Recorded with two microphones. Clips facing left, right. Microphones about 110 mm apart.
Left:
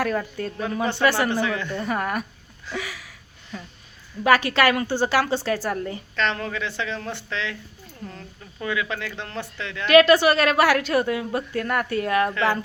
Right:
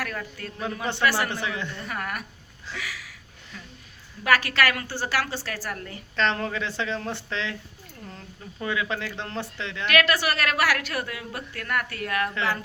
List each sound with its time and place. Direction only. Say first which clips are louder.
0.0 s a woman's voice: left 8 dB; 25° left (ahead or behind)
1.3 s speech: left 6 dB; 25° right (ahead or behind)
1.8 s a woman's voice: left 7 dB; 25° left (ahead or behind)
2.7 s a sound: left 5 dB; 25° left (ahead or behind)
4.2 s a woman's voice: left 4 dB; 20° left (ahead or behind)
6.1 s speech: right 1 dB; 30° right (ahead or behind)
8.6 s speech: left 1 dB; 25° right (ahead or behind)
9.8 s a woman's voice: left 9 dB; 25° left (ahead or behind)